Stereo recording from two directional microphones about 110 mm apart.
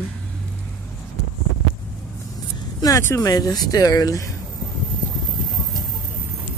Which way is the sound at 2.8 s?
30° left (ahead or behind).